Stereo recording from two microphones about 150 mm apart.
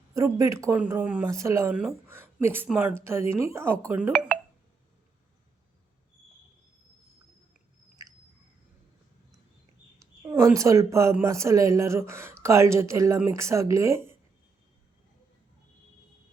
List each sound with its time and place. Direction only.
0.1 s speech: 20° right (ahead or behind)
1.7 s speech: 5° right (ahead or behind)
10.0 s speech: 20° right (ahead or behind)